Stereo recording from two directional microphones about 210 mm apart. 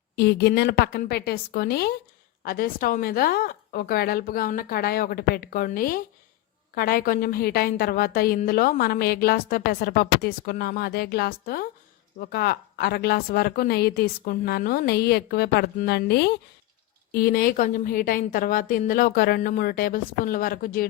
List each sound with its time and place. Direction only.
0.2 s a woman's voice: 50° left (ahead or behind)